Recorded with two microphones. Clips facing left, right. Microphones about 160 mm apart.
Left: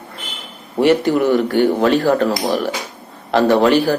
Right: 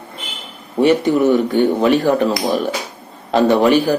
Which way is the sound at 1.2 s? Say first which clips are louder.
Right 1 dB; 20° right (ahead or behind).